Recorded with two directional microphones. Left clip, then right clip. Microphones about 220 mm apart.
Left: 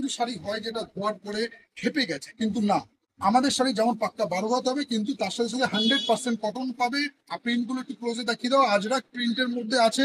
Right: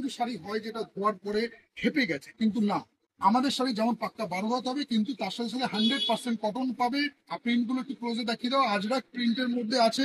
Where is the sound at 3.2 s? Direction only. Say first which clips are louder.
Left 3 dB; 30° left (ahead or behind).